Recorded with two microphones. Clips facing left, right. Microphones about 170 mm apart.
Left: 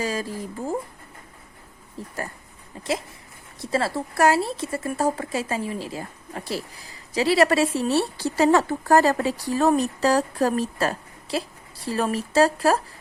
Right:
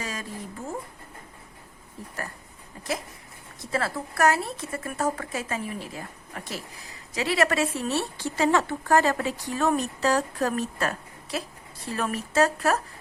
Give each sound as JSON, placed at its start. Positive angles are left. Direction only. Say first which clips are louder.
{"t": 0.0, "sound": "speech", "louder": "left 7 dB", "side_deg": 35}
{"t": 2.0, "sound": "speech", "louder": "left 5 dB", "side_deg": 30}
{"t": 3.6, "sound": "speech", "louder": "left 4 dB", "side_deg": 30}